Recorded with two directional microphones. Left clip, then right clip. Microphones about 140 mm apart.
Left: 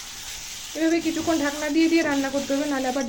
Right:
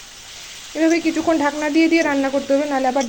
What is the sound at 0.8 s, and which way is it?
Speech, 50° right (ahead or behind).